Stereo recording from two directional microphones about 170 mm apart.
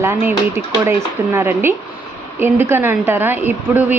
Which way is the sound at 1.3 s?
15° right (ahead or behind).